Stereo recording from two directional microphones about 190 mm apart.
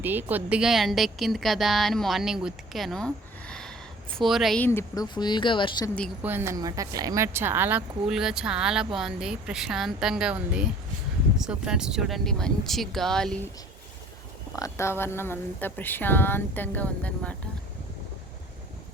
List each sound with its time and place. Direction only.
0.0 s speech: 10° right (ahead or behind); by 5.9 s 25° left (ahead or behind)
6.2 s speech: 10° right (ahead or behind); by 13.5 s 5° left (ahead or behind)
14.5 s speech: 15° left (ahead or behind)